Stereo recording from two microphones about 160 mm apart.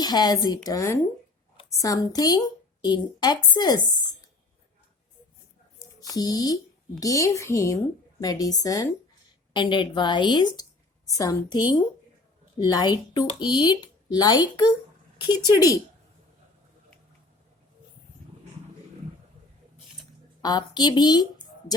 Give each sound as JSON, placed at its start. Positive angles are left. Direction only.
{"t": 0.0, "sound": "speech", "side_deg": 25}
{"t": 6.1, "sound": "a woman's voice", "side_deg": 25}
{"t": 15.5, "sound": "speech", "side_deg": 20}
{"t": 20.4, "sound": "speech", "side_deg": 25}